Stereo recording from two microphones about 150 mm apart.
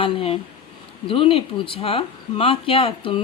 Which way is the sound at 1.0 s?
35° left (ahead or behind).